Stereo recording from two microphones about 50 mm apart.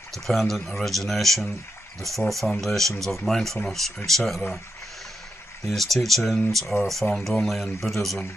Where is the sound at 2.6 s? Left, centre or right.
Centre.